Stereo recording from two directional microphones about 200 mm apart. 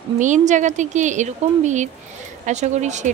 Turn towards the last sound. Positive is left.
turn(degrees=-35)  # may be behind; listen again after turning